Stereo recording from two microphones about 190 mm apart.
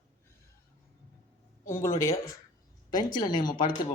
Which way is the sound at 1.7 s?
15° left (ahead or behind).